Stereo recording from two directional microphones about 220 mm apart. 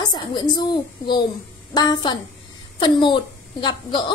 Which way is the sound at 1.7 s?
20° left (ahead or behind).